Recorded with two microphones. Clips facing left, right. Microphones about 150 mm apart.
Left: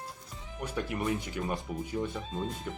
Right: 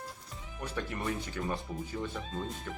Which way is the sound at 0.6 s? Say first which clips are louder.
Left 3 dB; 10° left (ahead or behind).